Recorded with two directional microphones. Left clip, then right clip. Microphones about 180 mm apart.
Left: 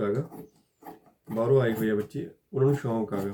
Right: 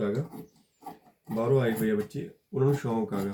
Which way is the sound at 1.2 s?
5° right (ahead or behind).